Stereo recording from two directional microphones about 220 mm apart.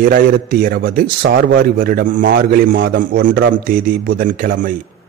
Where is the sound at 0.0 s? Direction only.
40° right (ahead or behind).